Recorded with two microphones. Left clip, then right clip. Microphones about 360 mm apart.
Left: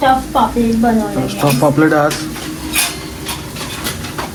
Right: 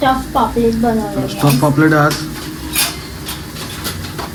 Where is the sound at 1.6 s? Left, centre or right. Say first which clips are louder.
Left 1 dB; left.